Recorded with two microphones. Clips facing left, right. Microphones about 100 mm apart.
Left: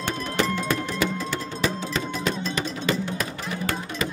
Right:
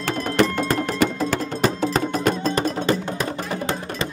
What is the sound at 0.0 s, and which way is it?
Music, 60° right (ahead or behind).